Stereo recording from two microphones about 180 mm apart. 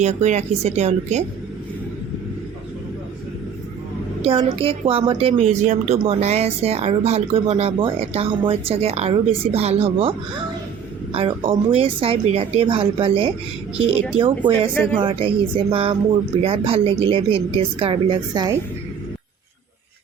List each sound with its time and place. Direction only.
0.0 s a woman's voice: 40° right (ahead or behind)
4.2 s a woman's voice: 30° right (ahead or behind)